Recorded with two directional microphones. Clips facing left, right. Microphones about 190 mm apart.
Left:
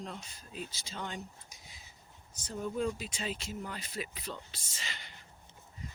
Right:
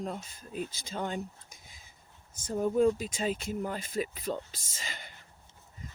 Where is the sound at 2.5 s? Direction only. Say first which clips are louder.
Right 8 dB; 45° right (ahead or behind).